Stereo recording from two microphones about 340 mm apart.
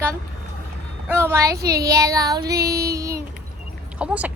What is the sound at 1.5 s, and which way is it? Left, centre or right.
Speech, right.